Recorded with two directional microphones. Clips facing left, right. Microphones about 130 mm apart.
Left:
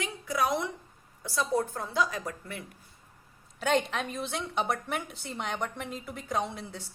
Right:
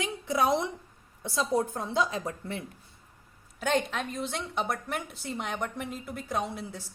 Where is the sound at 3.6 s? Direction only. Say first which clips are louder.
Left 1 dB; centre (ahead or behind).